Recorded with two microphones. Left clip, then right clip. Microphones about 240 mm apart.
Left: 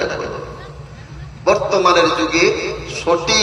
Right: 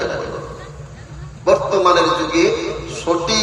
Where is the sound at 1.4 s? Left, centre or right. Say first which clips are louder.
Even; left.